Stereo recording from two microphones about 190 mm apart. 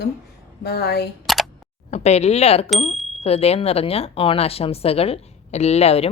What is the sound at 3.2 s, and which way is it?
Speech, 35° left (ahead or behind).